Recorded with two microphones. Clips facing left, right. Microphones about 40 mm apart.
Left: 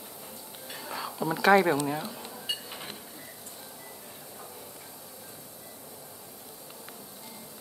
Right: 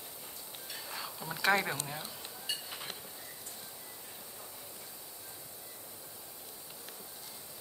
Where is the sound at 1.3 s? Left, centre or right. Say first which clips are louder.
Left 9 dB; centre.